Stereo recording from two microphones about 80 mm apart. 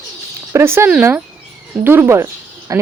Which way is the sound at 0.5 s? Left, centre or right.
Right.